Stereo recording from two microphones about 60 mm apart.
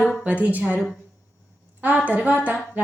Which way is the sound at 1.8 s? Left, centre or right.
Right.